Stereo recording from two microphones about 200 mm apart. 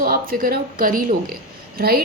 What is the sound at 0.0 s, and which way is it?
Speech, 45° right (ahead or behind).